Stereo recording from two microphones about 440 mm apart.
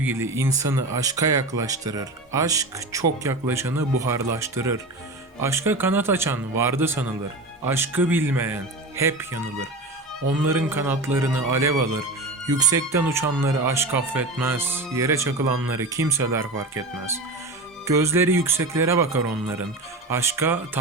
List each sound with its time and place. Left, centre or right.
0.0 s speech: centre
11.7 s speech: right
12.5 s speech: centre
17.8 s speech: centre